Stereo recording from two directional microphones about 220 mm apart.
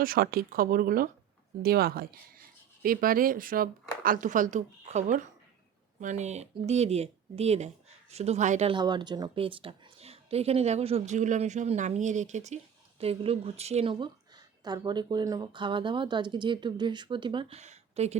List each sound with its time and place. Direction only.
0.0 s speech: 40° right (ahead or behind)